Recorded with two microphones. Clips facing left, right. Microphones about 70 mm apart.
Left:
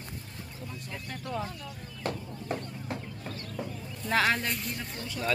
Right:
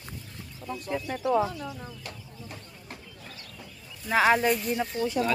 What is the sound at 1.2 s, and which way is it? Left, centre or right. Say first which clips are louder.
Speech: right 11 dB; right.